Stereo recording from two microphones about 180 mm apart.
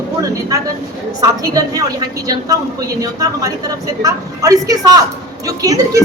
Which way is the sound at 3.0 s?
20° right (ahead or behind).